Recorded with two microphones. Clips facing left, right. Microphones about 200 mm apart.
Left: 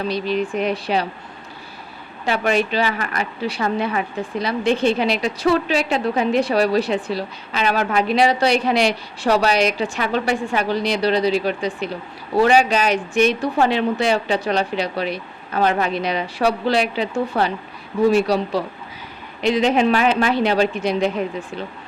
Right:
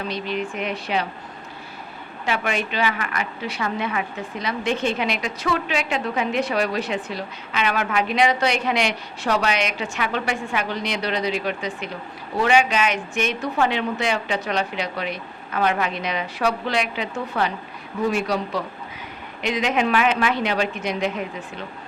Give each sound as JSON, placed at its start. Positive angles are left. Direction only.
{"t": 0.1, "sound": "a woman's voice", "side_deg": 35}
{"t": 2.2, "sound": "a woman's voice", "side_deg": 35}